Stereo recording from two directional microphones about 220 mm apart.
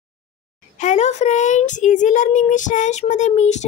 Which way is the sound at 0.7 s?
30° left (ahead or behind).